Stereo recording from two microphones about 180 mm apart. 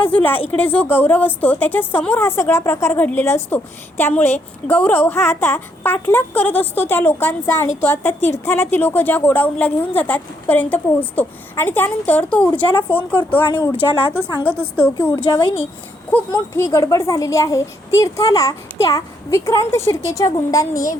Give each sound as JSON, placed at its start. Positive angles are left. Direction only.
{"t": 0.0, "sound": "a woman's voice", "side_deg": 10}
{"t": 13.7, "sound": "a woman's voice", "side_deg": 30}
{"t": 16.6, "sound": "a woman's voice", "side_deg": 15}